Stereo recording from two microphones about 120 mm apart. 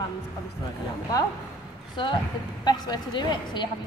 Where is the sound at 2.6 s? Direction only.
35° left (ahead or behind).